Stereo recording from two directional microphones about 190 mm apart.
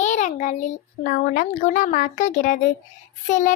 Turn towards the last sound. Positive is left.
turn(degrees=40)  # may be behind; listen again after turning